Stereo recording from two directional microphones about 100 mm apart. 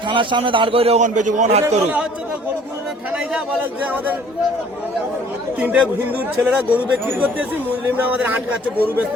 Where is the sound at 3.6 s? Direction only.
15° right (ahead or behind).